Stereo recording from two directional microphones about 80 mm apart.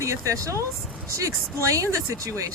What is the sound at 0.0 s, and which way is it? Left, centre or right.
Speech, right.